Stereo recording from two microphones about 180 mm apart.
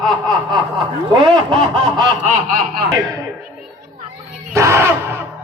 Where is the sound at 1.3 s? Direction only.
25° right (ahead or behind).